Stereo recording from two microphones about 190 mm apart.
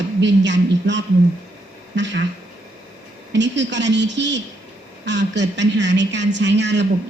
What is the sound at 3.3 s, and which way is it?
A woman's voice, 70° right (ahead or behind).